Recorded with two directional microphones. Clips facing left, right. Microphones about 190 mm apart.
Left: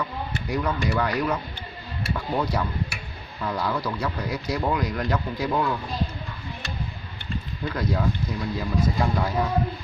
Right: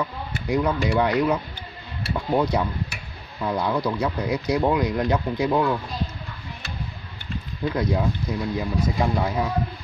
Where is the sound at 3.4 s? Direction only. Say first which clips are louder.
Right 3 dB; 20° right (ahead or behind).